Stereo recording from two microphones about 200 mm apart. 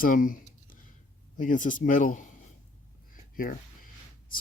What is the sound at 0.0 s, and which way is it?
Speech, 45° left (ahead or behind).